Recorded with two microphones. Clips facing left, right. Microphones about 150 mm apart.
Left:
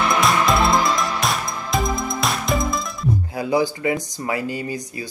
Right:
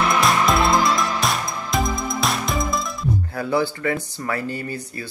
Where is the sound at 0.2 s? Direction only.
Centre (ahead or behind).